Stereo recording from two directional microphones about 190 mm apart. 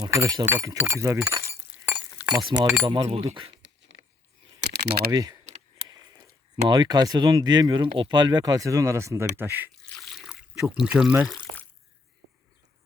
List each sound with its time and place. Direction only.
0.0 s speech: 20° right (ahead or behind)
1.3 s glass: 15° right (ahead or behind)
2.3 s speech: 25° right (ahead or behind)
3.5 s a sound: 70° right (ahead or behind)
5.1 s speech: 20° right (ahead or behind)
6.7 s speech: 25° right (ahead or behind)
10.0 s water: centre (ahead or behind)